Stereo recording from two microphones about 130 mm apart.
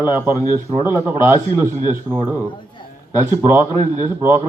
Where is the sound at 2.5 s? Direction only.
40° left (ahead or behind).